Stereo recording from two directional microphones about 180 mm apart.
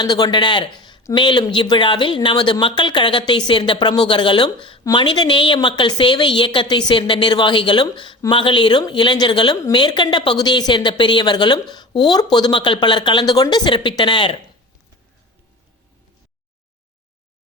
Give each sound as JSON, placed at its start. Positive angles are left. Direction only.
{"t": 0.0, "sound": "speech", "side_deg": 25}